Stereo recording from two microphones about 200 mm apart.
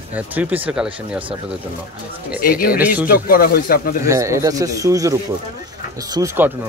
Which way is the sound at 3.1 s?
50° left (ahead or behind).